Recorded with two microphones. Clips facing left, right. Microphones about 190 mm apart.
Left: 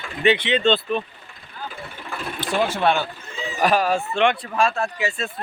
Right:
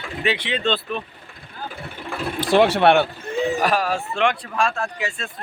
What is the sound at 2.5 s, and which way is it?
Speech, 70° right (ahead or behind).